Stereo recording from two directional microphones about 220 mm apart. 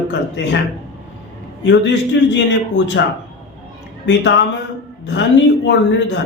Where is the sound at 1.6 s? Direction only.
55° left (ahead or behind).